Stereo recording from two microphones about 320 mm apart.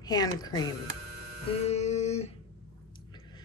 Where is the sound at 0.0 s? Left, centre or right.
Centre.